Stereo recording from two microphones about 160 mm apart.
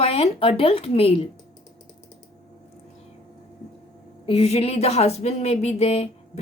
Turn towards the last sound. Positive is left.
turn(degrees=40)  # may be behind; listen again after turning